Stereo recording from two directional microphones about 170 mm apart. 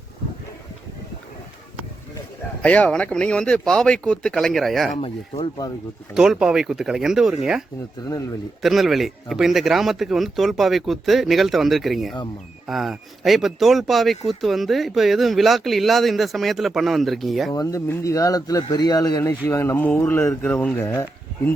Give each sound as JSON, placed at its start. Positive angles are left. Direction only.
{"t": 2.6, "sound": "a man's voice", "side_deg": 5}
{"t": 4.9, "sound": "speech", "side_deg": 35}
{"t": 5.4, "sound": "speech", "side_deg": 20}
{"t": 6.1, "sound": "a man's voice", "side_deg": -5}
{"t": 8.6, "sound": "a man's voice", "side_deg": 0}
{"t": 17.5, "sound": "speech", "side_deg": 20}